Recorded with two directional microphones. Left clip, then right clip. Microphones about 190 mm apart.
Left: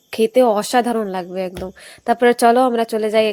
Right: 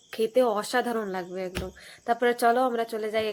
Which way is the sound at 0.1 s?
40° left (ahead or behind).